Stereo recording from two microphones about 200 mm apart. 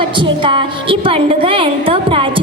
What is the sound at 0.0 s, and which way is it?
A woman's voice, 25° right (ahead or behind).